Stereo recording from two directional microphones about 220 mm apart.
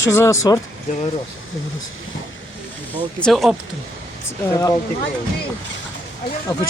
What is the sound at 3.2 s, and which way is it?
Speech, centre (ahead or behind).